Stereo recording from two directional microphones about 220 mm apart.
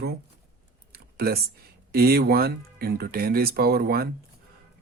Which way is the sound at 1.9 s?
45° right (ahead or behind).